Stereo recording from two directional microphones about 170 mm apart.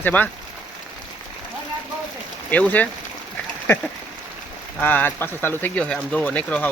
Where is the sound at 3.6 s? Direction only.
10° left (ahead or behind).